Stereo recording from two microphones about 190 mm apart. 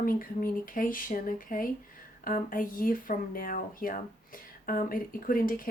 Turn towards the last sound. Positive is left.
turn(degrees=50)  # may be behind; listen again after turning